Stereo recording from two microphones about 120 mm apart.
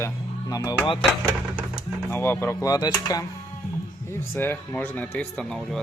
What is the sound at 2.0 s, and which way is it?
Speech, 20° left (ahead or behind).